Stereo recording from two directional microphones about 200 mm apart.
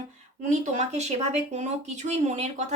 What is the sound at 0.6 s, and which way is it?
A woman's voice, 35° right (ahead or behind).